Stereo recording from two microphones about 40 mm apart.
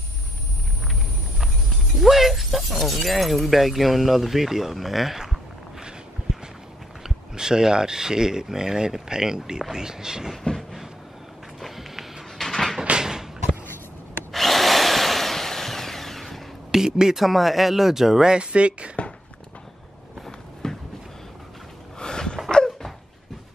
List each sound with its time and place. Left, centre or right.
2.0 s speech: centre
7.0 s speech: centre
11.6 s walk: centre
12.4 s a sound: centre
13.0 s door: centre
14.3 s drill: centre
16.7 s speech: centre
17.2 s speech: centre
18.3 s speech: right
20.6 s a sound: centre
21.9 s a sound: centre